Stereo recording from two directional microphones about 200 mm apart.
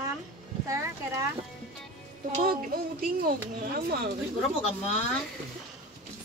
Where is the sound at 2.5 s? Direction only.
50° right (ahead or behind).